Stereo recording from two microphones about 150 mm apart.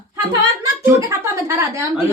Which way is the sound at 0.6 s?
20° right (ahead or behind).